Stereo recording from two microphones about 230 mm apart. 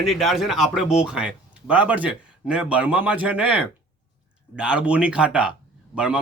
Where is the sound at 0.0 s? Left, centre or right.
Centre.